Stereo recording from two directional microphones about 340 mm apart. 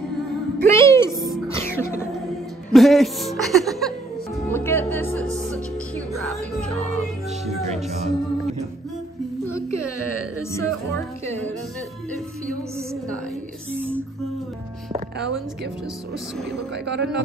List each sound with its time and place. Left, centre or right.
0.7 s music: centre
7.7 s speech: centre
9.7 s whimper: right
10.5 s music: centre
13.7 s music: centre
14.9 s music: right
16.7 s speech: right